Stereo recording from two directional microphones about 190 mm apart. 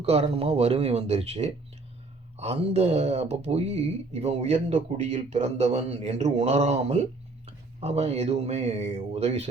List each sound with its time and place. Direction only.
0.0 s speech: 30° right (ahead or behind)